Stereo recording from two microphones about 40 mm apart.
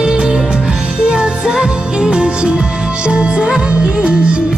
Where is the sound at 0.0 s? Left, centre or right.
Right.